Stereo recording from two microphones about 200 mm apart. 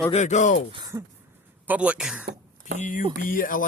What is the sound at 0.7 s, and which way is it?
Speech, 20° right (ahead or behind).